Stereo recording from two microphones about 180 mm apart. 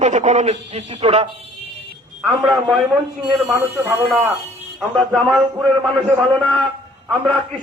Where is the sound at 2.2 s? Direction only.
Centre (ahead or behind).